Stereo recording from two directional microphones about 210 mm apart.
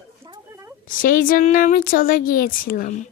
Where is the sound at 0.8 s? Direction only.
40° left (ahead or behind).